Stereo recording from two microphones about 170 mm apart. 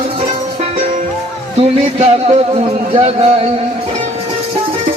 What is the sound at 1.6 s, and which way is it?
A man's voice, 35° right (ahead or behind).